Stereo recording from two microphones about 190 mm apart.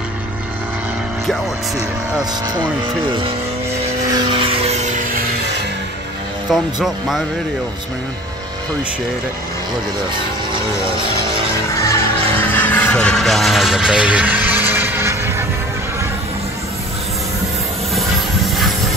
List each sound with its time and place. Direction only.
4.1 s music: 25° right (ahead or behind)
6.5 s speech: centre (ahead or behind)
11.7 s music: 15° left (ahead or behind); by 15.4 s 10° right (ahead or behind)